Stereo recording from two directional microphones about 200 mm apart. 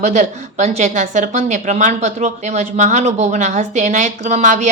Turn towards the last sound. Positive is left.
turn(degrees=-35)  # may be behind; listen again after turning